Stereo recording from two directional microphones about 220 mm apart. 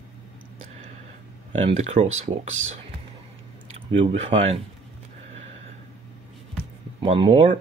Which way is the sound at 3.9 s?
25° right (ahead or behind).